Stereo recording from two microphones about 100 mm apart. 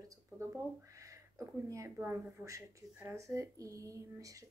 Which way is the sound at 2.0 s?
20° right (ahead or behind).